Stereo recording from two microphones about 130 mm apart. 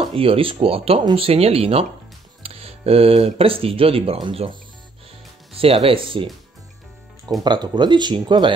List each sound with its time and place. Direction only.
0.0 s speech: 45° right (ahead or behind)
7.4 s speech: 35° right (ahead or behind)